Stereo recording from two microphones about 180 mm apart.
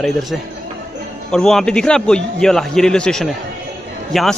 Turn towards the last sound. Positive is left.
turn(degrees=0)  # may be behind; listen again after turning